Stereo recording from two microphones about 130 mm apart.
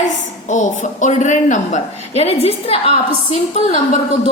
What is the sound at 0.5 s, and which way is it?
A woman's voice, 70° left (ahead or behind).